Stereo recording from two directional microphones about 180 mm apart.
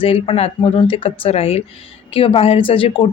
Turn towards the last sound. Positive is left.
turn(degrees=30)  # may be behind; listen again after turning